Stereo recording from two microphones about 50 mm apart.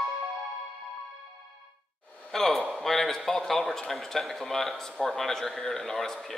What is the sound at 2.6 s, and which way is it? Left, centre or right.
A man's voice, centre.